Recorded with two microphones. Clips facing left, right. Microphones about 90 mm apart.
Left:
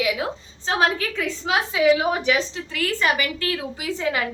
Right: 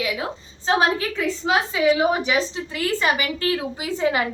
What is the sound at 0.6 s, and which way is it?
Speech, 15° right (ahead or behind).